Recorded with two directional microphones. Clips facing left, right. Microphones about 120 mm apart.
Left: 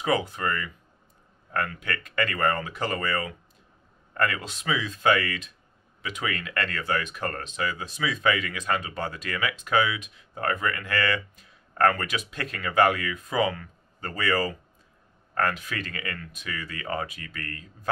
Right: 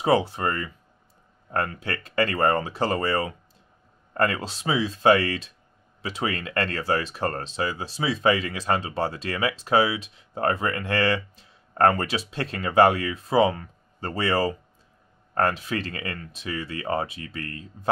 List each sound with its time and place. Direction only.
0.0 s speech: 30° right (ahead or behind)